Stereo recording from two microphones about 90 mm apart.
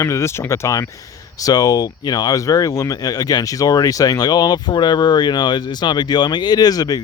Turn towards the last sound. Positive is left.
turn(degrees=45)  # may be behind; listen again after turning